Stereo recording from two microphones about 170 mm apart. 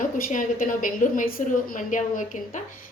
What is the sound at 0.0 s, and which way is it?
A woman's voice, 50° left (ahead or behind).